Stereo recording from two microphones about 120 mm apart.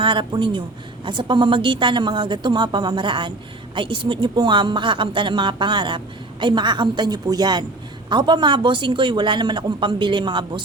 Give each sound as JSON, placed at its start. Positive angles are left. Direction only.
{"t": 0.0, "sound": "a woman's voice", "side_deg": -45}